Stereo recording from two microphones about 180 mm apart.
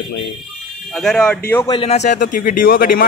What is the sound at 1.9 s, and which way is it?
Speech, 40° left (ahead or behind).